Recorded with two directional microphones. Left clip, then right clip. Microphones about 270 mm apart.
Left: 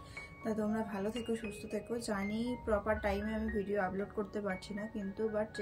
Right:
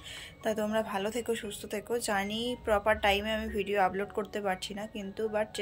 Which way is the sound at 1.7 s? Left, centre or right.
Centre.